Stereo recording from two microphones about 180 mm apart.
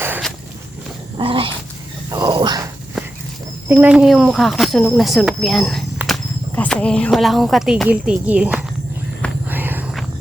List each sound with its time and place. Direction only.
1.2 s dog: 30° right (ahead or behind)
3.7 s speech: 10° right (ahead or behind)
6.0 s a sound: 10° right (ahead or behind)
6.6 s speech: 5° left (ahead or behind)
9.5 s walk: 10° right (ahead or behind)